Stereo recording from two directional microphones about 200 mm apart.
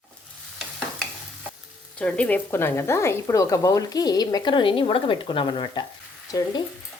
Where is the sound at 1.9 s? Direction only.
5° left (ahead or behind); by 6.6 s 20° left (ahead or behind).